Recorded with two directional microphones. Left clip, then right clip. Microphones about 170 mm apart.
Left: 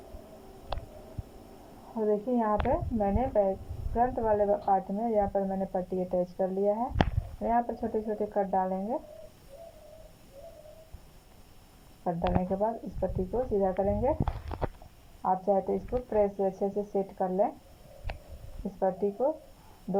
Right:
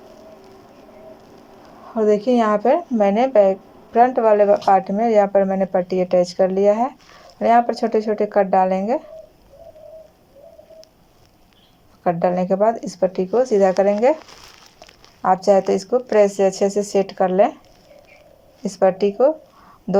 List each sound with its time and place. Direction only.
2.0 s a woman's voice: 55° right (ahead or behind)
12.0 s speech: 45° right (ahead or behind)
15.2 s speech: 45° right (ahead or behind)
18.8 s a woman's voice: 40° right (ahead or behind)